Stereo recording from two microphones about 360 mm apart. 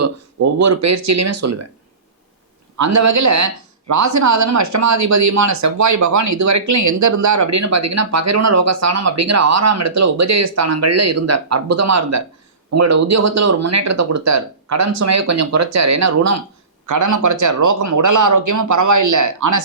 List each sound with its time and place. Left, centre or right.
0.6 s speech: right
2.7 s speech: right